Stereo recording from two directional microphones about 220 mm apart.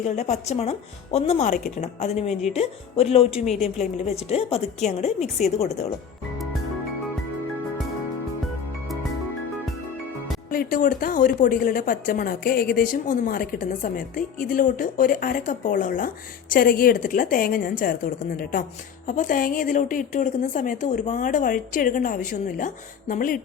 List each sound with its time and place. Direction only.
0.0 s a woman's voice: 30° left (ahead or behind)
10.5 s a woman's voice: 40° left (ahead or behind)